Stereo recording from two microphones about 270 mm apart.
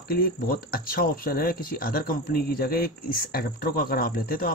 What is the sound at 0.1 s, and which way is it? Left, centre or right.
Speech, left.